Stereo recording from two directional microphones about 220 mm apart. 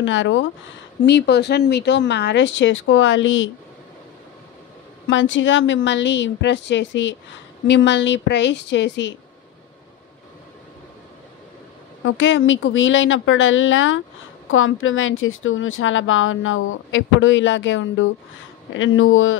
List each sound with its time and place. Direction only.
0.0 s a woman's voice: 60° left (ahead or behind)
5.0 s a woman's voice: 60° left (ahead or behind)
12.0 s a woman's voice: 60° left (ahead or behind)